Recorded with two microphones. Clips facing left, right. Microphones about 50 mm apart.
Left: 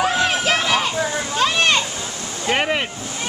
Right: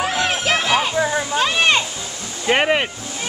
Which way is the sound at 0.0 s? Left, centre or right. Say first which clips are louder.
Left 2 dB; centre.